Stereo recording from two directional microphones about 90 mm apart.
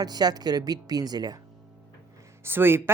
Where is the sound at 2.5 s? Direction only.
25° right (ahead or behind).